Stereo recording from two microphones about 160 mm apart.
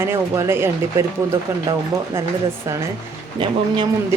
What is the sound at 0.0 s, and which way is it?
Speech, 15° right (ahead or behind).